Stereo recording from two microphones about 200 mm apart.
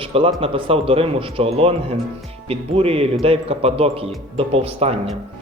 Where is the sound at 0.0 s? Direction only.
25° right (ahead or behind).